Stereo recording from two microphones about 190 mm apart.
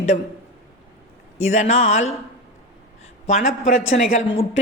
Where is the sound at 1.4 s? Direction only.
40° left (ahead or behind).